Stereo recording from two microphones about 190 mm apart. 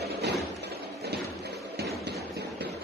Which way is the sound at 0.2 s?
60° right (ahead or behind).